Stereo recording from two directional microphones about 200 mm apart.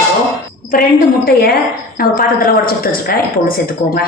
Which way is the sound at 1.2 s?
50° left (ahead or behind).